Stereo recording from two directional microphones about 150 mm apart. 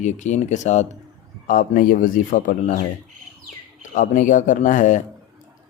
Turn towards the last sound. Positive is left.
turn(degrees=55)  # may be behind; listen again after turning